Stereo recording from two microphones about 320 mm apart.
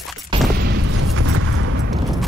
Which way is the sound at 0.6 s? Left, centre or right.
Right.